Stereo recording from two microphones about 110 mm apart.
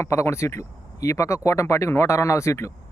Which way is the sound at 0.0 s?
25° left (ahead or behind).